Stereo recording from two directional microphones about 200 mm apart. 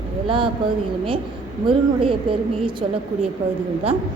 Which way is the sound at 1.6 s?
25° right (ahead or behind).